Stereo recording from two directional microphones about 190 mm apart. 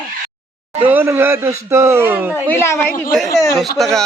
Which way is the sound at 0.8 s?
10° right (ahead or behind).